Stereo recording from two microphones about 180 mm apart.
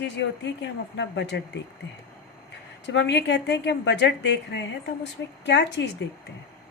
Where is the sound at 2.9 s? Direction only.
75° left (ahead or behind).